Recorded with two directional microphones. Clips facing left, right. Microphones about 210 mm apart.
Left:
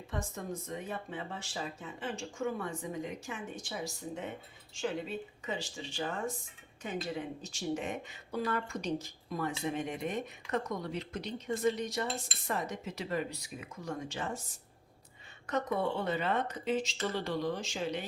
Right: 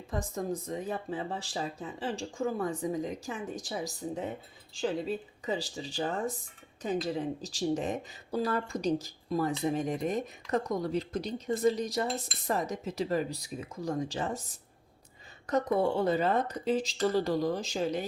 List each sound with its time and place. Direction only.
0.1 s speech: 35° right (ahead or behind)
15.4 s speech: 35° right (ahead or behind)